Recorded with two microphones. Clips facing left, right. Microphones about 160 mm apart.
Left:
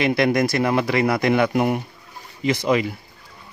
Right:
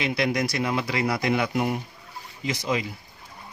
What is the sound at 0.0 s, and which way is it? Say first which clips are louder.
Speech: left 6 dB; 55° left (ahead or behind).